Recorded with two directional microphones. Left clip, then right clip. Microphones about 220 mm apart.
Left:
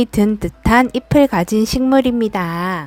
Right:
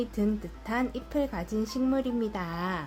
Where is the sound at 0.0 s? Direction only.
45° left (ahead or behind).